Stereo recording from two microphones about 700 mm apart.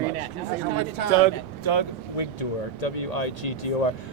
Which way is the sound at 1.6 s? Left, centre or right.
Left.